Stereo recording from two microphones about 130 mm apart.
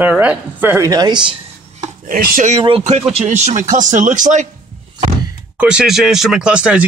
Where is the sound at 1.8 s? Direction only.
80° right.